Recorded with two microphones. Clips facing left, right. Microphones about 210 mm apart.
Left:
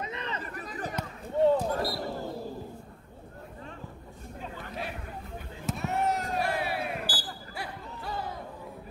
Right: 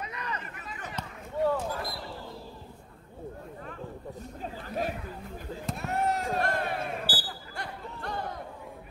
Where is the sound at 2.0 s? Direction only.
45° left (ahead or behind).